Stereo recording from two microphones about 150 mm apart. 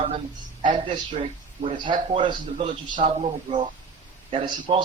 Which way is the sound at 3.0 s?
45° right (ahead or behind).